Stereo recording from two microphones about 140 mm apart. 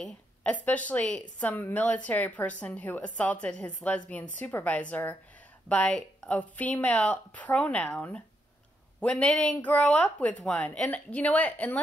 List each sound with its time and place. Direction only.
0.0 s speech: 10° left (ahead or behind)